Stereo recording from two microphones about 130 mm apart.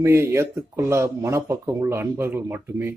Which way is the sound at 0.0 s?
20° right (ahead or behind).